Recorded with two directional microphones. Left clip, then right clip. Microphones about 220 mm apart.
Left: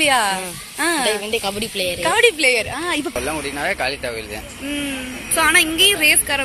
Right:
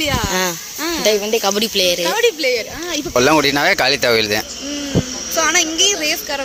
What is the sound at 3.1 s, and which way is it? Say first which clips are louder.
Speech: right 11 dB; 50° right (ahead or behind).